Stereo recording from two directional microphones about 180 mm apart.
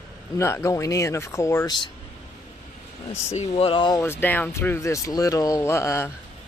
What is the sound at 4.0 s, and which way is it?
Speech, 15° left (ahead or behind).